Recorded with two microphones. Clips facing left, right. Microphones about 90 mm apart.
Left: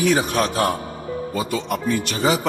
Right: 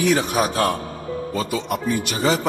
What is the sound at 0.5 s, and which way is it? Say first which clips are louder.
Speech: even; 20° left (ahead or behind).